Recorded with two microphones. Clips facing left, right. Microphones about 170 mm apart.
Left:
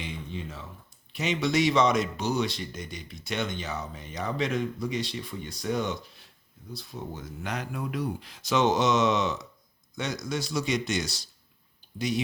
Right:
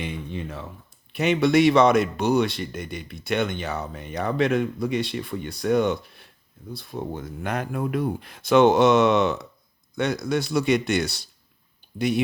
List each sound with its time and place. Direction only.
0.0 s speech: 60° right (ahead or behind)